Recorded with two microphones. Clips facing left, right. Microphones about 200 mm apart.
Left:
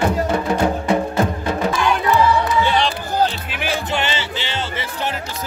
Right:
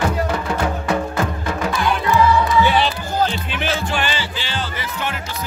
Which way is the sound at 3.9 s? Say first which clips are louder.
Left 1 dB; 20° left (ahead or behind).